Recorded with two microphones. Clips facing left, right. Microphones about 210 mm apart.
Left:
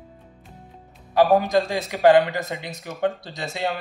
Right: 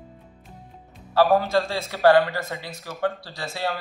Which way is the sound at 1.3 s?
15° left (ahead or behind).